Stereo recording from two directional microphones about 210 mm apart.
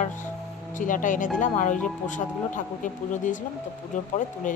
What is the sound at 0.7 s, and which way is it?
A woman's voice, 40° left (ahead or behind).